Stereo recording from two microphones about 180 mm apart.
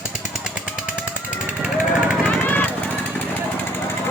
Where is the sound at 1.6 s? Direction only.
5° right (ahead or behind).